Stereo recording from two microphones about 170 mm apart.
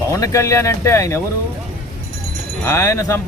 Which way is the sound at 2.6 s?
15° left (ahead or behind).